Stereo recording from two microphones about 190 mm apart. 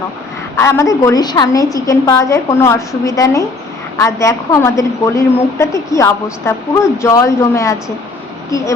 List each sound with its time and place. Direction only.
0.5 s a woman's voice: 15° left (ahead or behind)